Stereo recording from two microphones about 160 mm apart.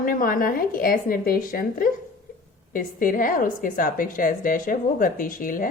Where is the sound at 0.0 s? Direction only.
60° left (ahead or behind).